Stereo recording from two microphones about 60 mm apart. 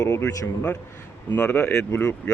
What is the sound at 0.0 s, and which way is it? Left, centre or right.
Speech, left.